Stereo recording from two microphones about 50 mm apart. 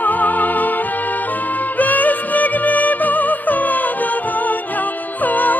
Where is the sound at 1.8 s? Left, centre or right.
Left.